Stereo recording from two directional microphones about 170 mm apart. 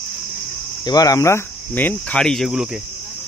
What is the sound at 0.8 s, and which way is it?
Cricket, 20° left (ahead or behind).